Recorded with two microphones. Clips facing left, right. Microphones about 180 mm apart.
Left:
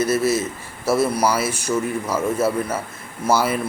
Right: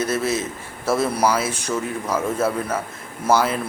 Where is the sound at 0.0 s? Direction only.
5° left (ahead or behind).